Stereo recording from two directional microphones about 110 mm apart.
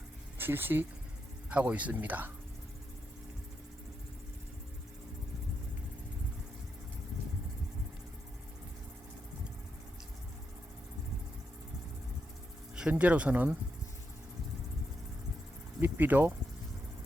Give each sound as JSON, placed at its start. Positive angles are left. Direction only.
{"t": 0.3, "sound": "speech", "side_deg": -20}
{"t": 12.7, "sound": "speech", "side_deg": -10}
{"t": 15.8, "sound": "speech", "side_deg": -15}